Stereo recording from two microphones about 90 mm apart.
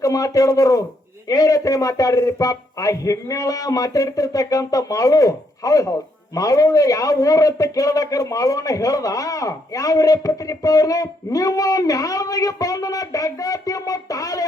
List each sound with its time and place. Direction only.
0.0 s a man's voice: 40° left (ahead or behind)